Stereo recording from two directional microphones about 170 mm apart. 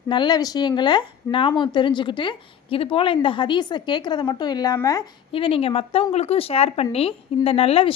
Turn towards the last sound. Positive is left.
turn(degrees=35)  # may be behind; listen again after turning